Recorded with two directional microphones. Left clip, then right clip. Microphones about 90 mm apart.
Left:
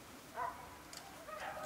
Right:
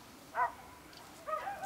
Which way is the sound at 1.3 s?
55° right (ahead or behind).